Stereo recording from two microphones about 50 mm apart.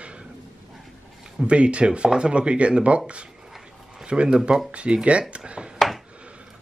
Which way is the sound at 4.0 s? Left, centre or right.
Centre.